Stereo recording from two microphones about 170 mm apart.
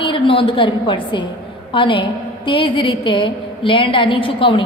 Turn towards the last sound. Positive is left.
turn(degrees=30)  # may be behind; listen again after turning